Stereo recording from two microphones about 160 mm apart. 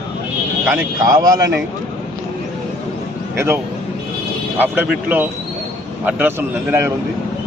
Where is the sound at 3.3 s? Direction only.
15° right (ahead or behind).